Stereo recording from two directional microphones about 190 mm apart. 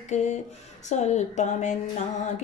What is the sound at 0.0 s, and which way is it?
Speech, 40° left (ahead or behind).